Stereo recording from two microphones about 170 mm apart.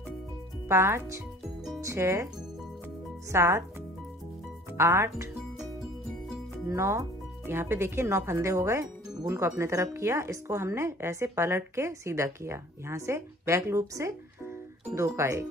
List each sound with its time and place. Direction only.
0.7 s speech: 15° right (ahead or behind)
3.3 s speech: 15° right (ahead or behind)
4.7 s speech: 15° right (ahead or behind)
6.7 s speech: 15° right (ahead or behind)